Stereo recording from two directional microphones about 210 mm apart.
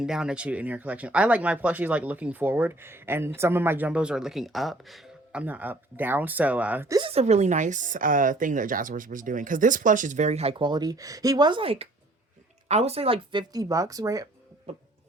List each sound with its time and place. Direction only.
0.0 s speech: 5° right (ahead or behind)
7.1 s a woman's voice: 30° right (ahead or behind)